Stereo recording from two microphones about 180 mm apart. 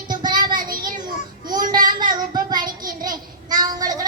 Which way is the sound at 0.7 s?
50° right (ahead or behind).